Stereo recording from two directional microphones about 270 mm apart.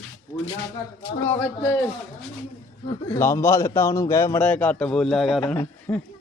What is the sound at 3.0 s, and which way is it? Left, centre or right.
Speech, centre.